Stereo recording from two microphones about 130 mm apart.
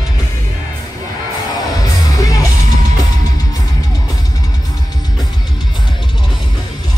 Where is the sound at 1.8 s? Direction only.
30° left (ahead or behind).